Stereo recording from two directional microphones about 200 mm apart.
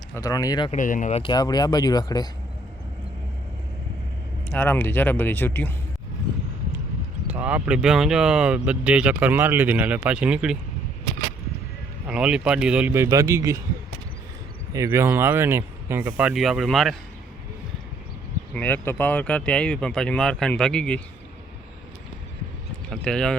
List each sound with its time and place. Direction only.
0.1 s speech: 15° left (ahead or behind)
0.7 s speech: 40° left (ahead or behind)
1.2 s speech: 20° left (ahead or behind)
4.4 s speech: 10° left (ahead or behind)
7.3 s speech: 5° right (ahead or behind)
12.0 s speech: 5° right (ahead or behind)
14.7 s speech: 15° right (ahead or behind); by 16.9 s centre (ahead or behind)
18.5 s speech: 10° left (ahead or behind)
22.9 s speech: 5° left (ahead or behind)